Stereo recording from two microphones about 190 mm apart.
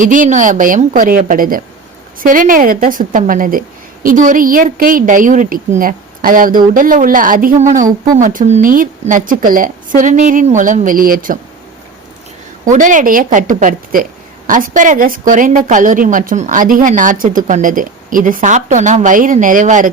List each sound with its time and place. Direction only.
0.0 s a woman's voice: 45° right (ahead or behind)
12.7 s a woman's voice: 40° right (ahead or behind)